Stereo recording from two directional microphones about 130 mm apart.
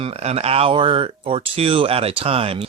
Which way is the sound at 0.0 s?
50° right (ahead or behind).